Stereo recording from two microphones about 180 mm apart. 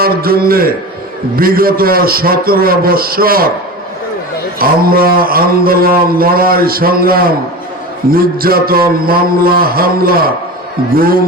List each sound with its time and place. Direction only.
0.0 s mantra: 55° right (ahead or behind)
4.6 s mantra: 55° right (ahead or behind)